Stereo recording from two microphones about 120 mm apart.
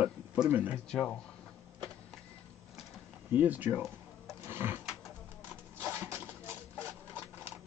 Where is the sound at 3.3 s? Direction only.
15° right (ahead or behind).